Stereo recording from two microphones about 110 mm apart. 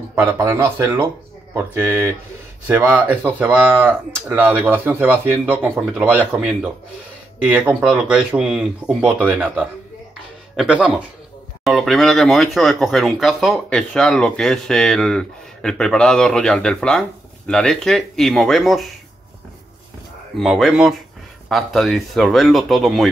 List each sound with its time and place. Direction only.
0.1 s speech: 15° right (ahead or behind)
0.4 s speech: 25° right (ahead or behind)
7.4 s speech: 10° right (ahead or behind)
11.6 s speech: centre (ahead or behind)
20.3 s speech: centre (ahead or behind)